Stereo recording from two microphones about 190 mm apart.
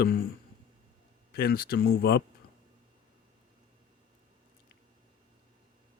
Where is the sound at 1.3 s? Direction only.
50° left (ahead or behind).